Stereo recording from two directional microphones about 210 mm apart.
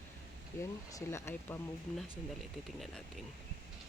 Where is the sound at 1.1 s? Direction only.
10° left (ahead or behind).